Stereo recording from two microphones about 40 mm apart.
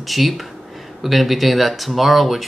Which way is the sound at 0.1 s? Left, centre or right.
Centre.